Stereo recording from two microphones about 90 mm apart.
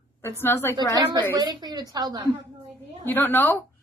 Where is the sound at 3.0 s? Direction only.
20° left (ahead or behind).